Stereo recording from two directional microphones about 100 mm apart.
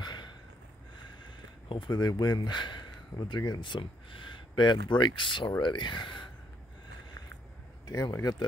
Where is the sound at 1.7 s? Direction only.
50° left (ahead or behind).